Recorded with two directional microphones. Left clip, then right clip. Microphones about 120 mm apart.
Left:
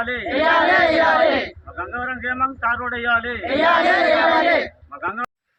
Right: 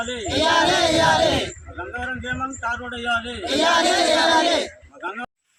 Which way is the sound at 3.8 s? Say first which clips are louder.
Left 2 dB; 20° right (ahead or behind).